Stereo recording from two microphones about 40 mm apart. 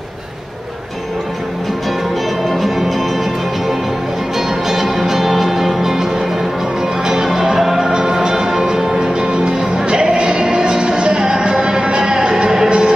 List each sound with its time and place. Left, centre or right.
2.5 s music: centre
4.4 s music: centre